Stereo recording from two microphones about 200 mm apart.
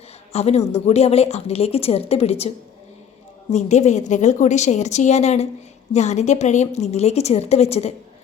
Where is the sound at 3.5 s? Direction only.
35° left (ahead or behind).